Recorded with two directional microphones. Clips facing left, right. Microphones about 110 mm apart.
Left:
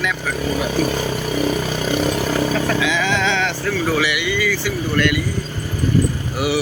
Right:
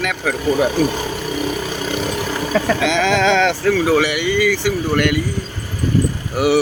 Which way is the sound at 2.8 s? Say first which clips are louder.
Right 3 dB; 75° right (ahead or behind).